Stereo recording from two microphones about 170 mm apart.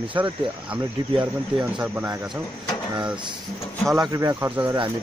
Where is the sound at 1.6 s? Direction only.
5° right (ahead or behind).